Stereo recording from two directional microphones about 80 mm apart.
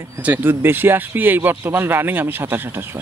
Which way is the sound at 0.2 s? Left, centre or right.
Right.